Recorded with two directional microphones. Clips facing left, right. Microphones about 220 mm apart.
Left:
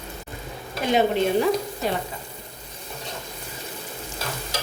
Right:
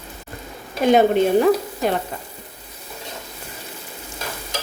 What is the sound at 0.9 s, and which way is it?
A woman's voice, 50° right (ahead or behind).